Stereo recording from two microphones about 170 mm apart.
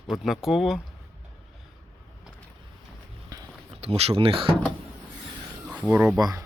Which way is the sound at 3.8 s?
35° right (ahead or behind).